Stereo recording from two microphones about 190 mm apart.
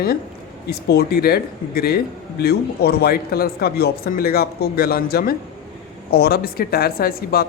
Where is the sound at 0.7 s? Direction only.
55° left (ahead or behind).